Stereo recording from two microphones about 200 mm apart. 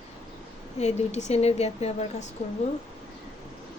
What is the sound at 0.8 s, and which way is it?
A woman's voice, 35° left (ahead or behind).